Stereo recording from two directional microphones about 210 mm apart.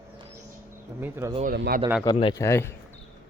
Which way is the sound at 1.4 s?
45° right (ahead or behind).